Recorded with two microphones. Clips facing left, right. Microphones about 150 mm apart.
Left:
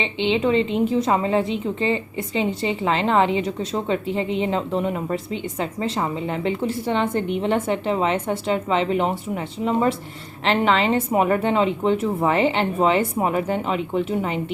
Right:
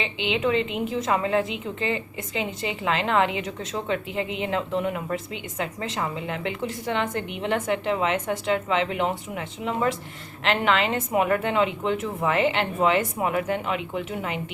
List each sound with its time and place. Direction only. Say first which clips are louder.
0.0 s a woman's voice: left 4 dB; 30° left (ahead or behind)